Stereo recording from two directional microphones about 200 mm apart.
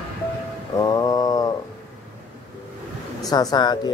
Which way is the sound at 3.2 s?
20° left (ahead or behind).